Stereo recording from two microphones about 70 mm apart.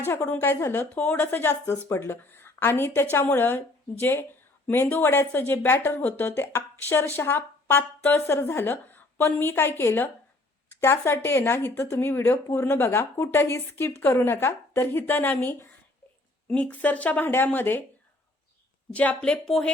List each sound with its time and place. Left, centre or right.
0.0 s speech: left
0.5 s speech: left
0.8 s a woman's voice: left
8.7 s speech: left
18.9 s speech: centre